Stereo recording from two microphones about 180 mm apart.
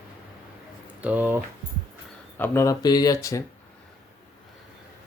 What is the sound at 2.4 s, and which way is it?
Speech, 15° left (ahead or behind).